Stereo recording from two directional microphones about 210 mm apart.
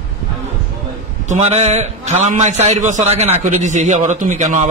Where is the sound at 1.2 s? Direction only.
35° right (ahead or behind).